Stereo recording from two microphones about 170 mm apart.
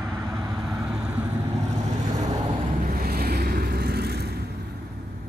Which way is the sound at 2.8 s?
60° right (ahead or behind).